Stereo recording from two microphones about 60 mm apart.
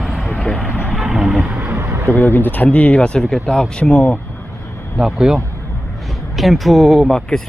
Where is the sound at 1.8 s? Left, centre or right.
Right.